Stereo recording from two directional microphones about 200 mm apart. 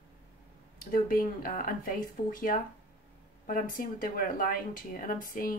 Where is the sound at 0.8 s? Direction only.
45° left (ahead or behind).